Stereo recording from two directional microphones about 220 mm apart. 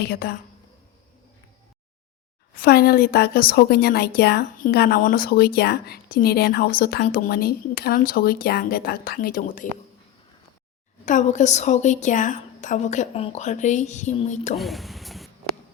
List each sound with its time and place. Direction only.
0.0 s speech: 45° left (ahead or behind)
2.6 s speech: 45° left (ahead or behind)
11.0 s a woman's voice: 35° left (ahead or behind)
14.5 s a sound: centre (ahead or behind)